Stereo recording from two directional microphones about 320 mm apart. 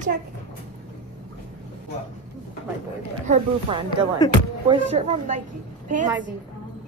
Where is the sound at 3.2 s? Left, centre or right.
Centre.